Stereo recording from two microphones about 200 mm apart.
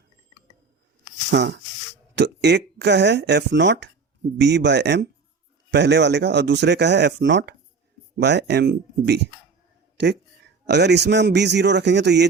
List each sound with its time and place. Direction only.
1.3 s speech: 55° right (ahead or behind)